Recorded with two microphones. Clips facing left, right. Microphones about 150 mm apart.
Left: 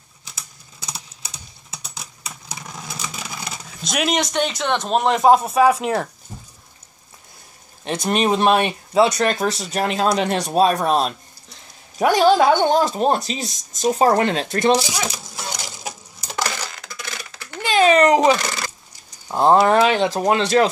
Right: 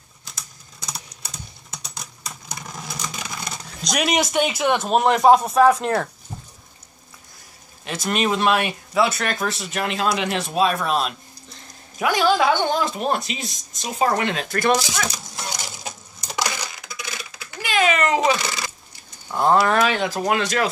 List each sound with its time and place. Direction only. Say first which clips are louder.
0.4 s typing: even; 5° left (ahead or behind)
2.6 s speech: even; centre (ahead or behind)
7.8 s speech: left 3 dB; 35° left (ahead or behind)
14.8 s speech: left 2 dB; 10° left (ahead or behind)
15.3 s crushing: left 1 dB; 5° left (ahead or behind)
16.3 s coin: left 1 dB; 15° right (ahead or behind)
17.6 s typing: left 6 dB; 30° left (ahead or behind)
19.3 s speech: left 4 dB; 25° left (ahead or behind)